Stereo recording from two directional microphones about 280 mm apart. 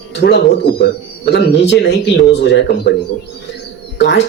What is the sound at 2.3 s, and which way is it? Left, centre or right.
Speech, left.